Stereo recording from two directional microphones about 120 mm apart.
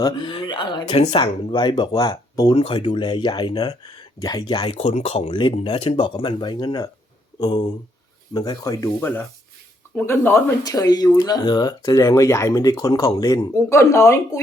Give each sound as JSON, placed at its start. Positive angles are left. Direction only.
{"t": 0.0, "sound": "speech", "side_deg": 35}
{"t": 2.0, "sound": "speech", "side_deg": 30}
{"t": 2.6, "sound": "speech", "side_deg": 50}
{"t": 4.8, "sound": "speech", "side_deg": 70}
{"t": 9.0, "sound": "speech", "side_deg": 15}
{"t": 10.6, "sound": "speech", "side_deg": 30}